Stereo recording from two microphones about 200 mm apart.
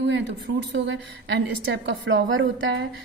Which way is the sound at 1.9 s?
70° right (ahead or behind).